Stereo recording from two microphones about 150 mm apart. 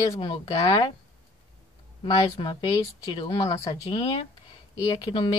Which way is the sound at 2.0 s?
30° left (ahead or behind).